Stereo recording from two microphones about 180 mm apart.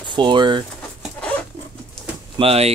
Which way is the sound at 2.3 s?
35° right (ahead or behind).